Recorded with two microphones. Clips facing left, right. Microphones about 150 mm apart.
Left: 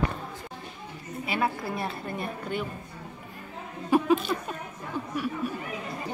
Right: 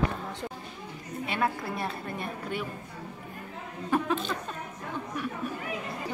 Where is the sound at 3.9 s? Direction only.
10° left (ahead or behind).